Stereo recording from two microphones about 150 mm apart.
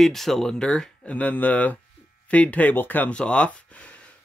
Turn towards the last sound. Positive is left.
turn(degrees=10)  # may be behind; listen again after turning